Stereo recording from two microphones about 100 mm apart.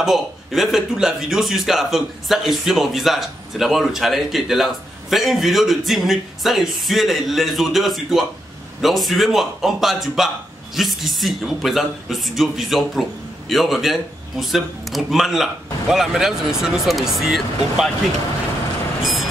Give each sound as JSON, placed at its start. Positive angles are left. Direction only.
{"t": 0.0, "sound": "a man's voice", "side_deg": -5}